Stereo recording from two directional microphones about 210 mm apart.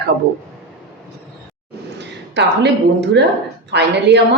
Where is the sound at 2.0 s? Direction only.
55° right (ahead or behind).